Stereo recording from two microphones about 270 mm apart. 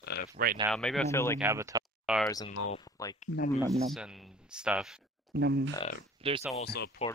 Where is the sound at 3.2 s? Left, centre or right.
Left.